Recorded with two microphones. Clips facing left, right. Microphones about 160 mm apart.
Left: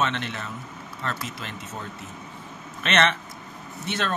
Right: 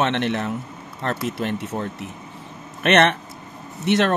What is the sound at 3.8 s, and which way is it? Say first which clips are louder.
Speech: right 10 dB; 70° right (ahead or behind).